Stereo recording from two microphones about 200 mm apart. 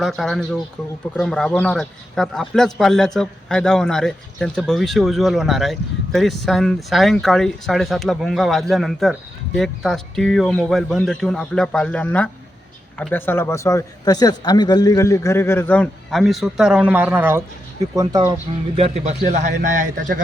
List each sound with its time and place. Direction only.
0.0 s a man's voice: centre (ahead or behind); by 18.3 s 20° right (ahead or behind)
18.8 s a man's voice: 35° right (ahead or behind)